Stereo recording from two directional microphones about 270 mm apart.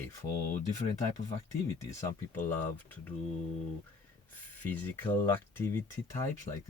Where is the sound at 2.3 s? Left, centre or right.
Centre.